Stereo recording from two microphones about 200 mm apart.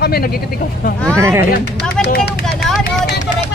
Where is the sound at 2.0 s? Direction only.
55° left (ahead or behind).